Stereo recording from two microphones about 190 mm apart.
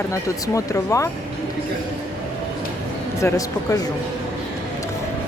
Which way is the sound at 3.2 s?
15° left (ahead or behind).